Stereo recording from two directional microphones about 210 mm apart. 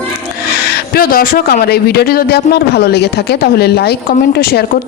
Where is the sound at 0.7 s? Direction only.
45° left (ahead or behind).